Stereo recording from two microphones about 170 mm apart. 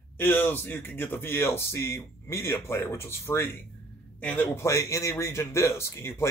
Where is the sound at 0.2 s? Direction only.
10° left (ahead or behind).